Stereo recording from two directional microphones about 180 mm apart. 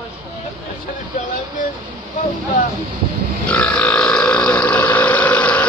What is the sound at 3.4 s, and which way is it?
Burping, 10° left (ahead or behind).